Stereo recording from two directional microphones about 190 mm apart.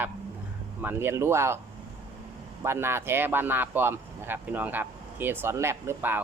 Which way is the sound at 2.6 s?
15° right (ahead or behind).